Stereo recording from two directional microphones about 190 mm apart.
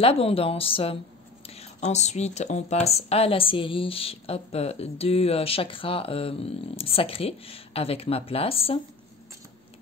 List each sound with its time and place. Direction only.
0.0 s a woman's voice: 30° left (ahead or behind)